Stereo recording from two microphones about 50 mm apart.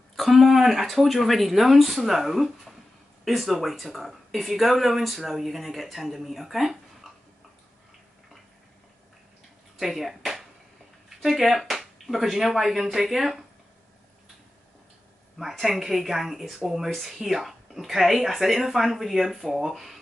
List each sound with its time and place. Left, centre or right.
0.1 s a sound: centre
0.4 s speech: centre
9.8 s speech: centre
15.6 s speech: centre